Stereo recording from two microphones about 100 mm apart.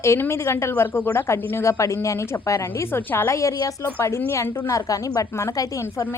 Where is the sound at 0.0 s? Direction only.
25° left (ahead or behind).